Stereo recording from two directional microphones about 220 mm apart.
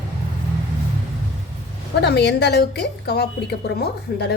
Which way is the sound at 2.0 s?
50° left (ahead or behind).